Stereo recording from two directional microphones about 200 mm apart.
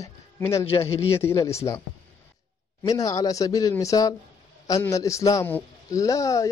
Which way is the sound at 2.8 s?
20° left (ahead or behind).